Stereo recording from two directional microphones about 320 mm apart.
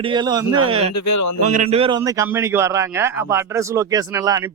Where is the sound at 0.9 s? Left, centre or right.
Left.